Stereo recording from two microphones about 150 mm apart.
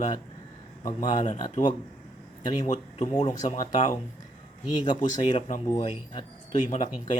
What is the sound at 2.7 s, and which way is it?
Speech, 50° left (ahead or behind).